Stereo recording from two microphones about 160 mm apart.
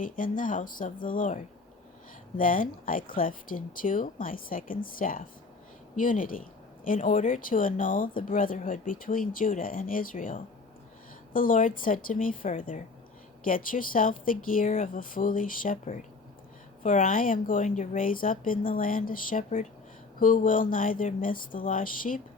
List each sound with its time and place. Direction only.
0.0 s speech: 55° left (ahead or behind)